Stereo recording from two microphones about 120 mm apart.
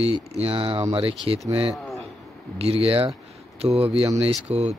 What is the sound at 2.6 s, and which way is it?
Speech, 55° right (ahead or behind).